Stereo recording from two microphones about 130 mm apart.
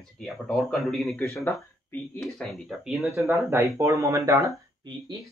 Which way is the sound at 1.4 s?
20° left (ahead or behind).